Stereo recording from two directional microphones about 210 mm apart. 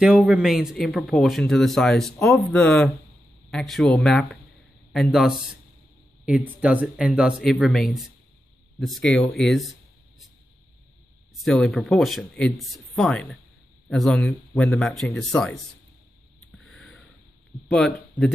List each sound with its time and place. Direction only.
0.0 s speech: 5° right (ahead or behind)
11.4 s speech: centre (ahead or behind)
16.5 s a sound: centre (ahead or behind)
17.6 s speech: 5° left (ahead or behind)